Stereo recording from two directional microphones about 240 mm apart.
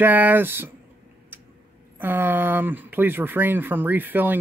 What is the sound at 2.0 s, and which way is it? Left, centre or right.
Speech, centre.